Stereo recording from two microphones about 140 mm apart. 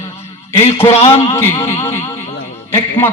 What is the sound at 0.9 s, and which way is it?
Speech, 50° left (ahead or behind).